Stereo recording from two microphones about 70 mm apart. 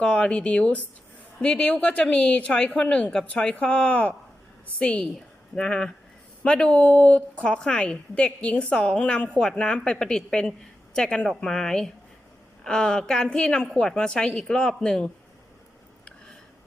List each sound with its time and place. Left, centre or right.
0.0 s a woman's voice: centre